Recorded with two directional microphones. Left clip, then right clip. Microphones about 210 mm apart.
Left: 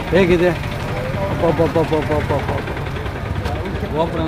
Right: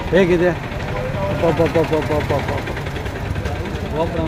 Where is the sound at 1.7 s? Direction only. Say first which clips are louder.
Even; 35° right (ahead or behind).